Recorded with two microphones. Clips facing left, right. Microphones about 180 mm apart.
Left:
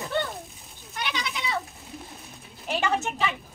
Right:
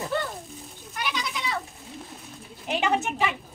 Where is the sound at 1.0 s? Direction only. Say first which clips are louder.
Right 1 dB; centre (ahead or behind).